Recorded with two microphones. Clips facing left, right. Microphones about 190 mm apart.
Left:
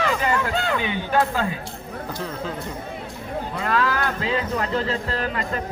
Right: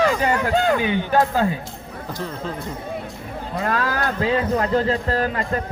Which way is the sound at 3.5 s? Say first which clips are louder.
Right 1 dB; 40° right (ahead or behind).